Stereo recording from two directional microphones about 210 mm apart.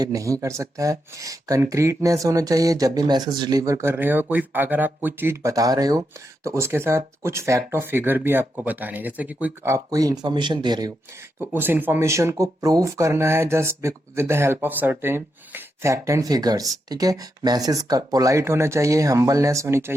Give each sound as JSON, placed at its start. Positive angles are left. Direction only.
{"t": 0.0, "sound": "speech", "side_deg": -15}